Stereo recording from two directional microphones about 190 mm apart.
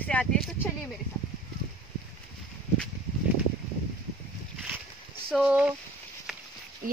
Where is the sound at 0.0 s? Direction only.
5° left (ahead or behind).